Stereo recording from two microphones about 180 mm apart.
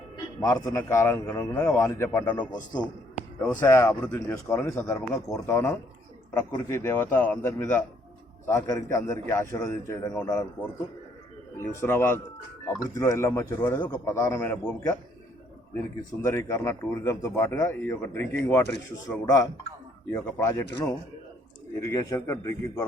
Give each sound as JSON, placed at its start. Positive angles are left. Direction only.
{"t": 0.3, "sound": "a man's voice", "side_deg": 20}
{"t": 3.4, "sound": "a man's voice", "side_deg": 10}
{"t": 11.5, "sound": "a man's voice", "side_deg": 15}
{"t": 16.2, "sound": "a man's voice", "side_deg": 15}
{"t": 21.8, "sound": "a man's voice", "side_deg": 20}